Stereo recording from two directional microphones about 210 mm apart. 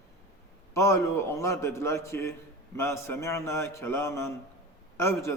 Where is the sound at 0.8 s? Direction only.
15° left (ahead or behind).